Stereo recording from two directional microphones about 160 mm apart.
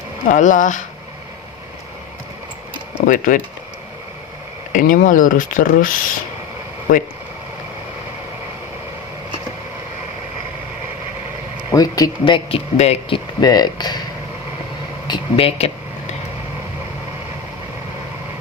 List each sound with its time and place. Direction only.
0.3 s speech: 55° left (ahead or behind)
3.1 s speech: 55° left (ahead or behind)
4.7 s speech: 65° left (ahead or behind)
6.9 s speech: 55° left (ahead or behind)
11.7 s speech: 20° left (ahead or behind)
15.0 s a sound: 30° left (ahead or behind)